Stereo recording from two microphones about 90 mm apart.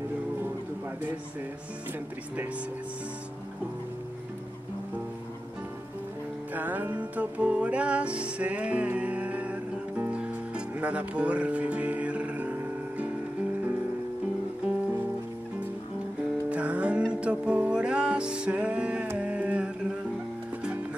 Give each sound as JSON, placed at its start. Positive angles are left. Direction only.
{"t": 6.5, "sound": "music", "side_deg": -20}
{"t": 14.6, "sound": "music", "side_deg": -15}
{"t": 16.4, "sound": "music", "side_deg": -15}